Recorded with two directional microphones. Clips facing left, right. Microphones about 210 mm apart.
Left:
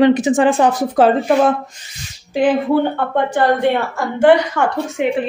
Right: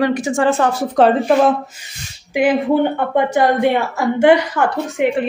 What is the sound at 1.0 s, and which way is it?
Speech, centre (ahead or behind).